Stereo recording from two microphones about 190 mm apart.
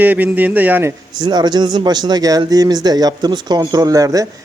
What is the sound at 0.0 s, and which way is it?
Speech, 10° right (ahead or behind).